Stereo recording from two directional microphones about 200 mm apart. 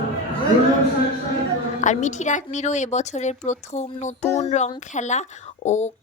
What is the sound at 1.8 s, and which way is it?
Speech, 35° left (ahead or behind).